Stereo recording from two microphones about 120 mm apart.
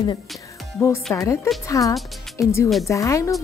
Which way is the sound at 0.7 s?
20° left (ahead or behind).